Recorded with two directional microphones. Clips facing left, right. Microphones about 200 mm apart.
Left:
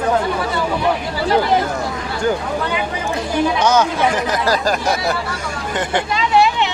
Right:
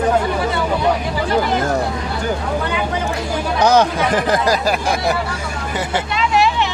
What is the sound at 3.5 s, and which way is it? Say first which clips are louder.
Speech: right 5 dB; 35° right (ahead or behind).